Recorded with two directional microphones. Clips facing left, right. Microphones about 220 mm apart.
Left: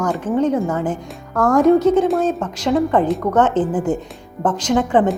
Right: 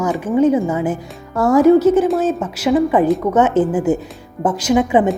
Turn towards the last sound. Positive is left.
turn(degrees=-10)  # may be behind; listen again after turning